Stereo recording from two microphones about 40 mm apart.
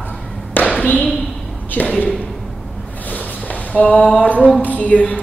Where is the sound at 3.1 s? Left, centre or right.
Left.